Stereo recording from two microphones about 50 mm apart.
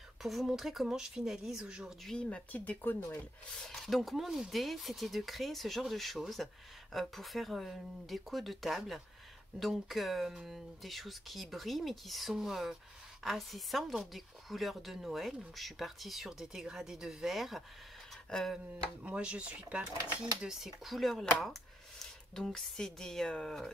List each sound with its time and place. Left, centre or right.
0.2 s speech: centre
2.2 s speech: left
3.5 s speech: centre
19.0 s speech: right
19.8 s speech: centre
21.4 s a sound: centre
22.3 s speech: centre